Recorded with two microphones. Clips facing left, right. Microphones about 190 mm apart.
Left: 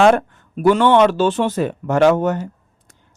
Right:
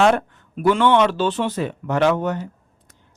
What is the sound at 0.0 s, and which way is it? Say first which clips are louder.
Speech: left 4 dB; 45° left (ahead or behind).